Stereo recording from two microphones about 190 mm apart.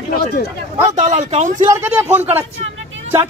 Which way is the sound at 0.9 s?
40° right (ahead or behind).